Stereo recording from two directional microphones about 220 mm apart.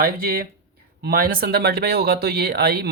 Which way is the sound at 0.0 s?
45° right (ahead or behind).